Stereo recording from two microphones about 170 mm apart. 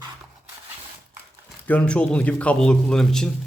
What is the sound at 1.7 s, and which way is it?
A man's voice, 5° left (ahead or behind).